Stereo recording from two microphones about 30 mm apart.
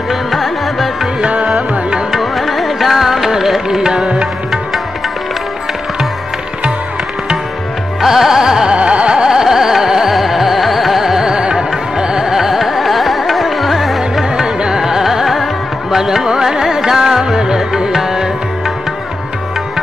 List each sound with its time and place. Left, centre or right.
0.1 s music: centre
1.2 s music: right
2.3 s music: centre
3.1 s music: centre
4.0 s music: right
8.0 s music: centre
8.7 s carnatic music: right
9.3 s carnatic music: centre
11.2 s music: right
12.3 s music: centre
14.3 s carnatic music: right; by 16.0 s centre
16.0 s music: centre
16.3 s carnatic music: right
16.9 s music: centre